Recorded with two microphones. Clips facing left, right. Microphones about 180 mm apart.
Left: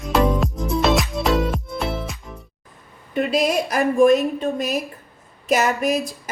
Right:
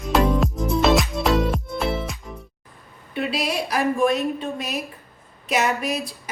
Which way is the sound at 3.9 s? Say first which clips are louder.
Left 10 dB; 45° left (ahead or behind).